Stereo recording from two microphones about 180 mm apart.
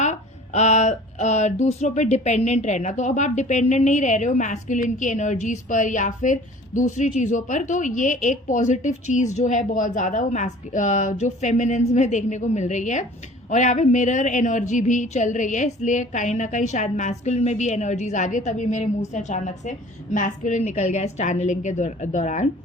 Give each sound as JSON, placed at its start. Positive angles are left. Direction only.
{"t": 0.0, "sound": "a woman's voice", "side_deg": 40}